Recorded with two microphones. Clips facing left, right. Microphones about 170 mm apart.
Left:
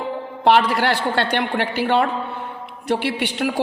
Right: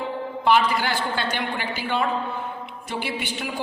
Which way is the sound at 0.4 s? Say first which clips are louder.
Left 4 dB; 70° left (ahead or behind).